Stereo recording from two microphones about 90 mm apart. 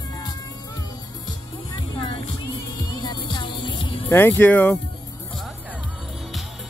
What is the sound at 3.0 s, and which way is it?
Music, 55° left (ahead or behind).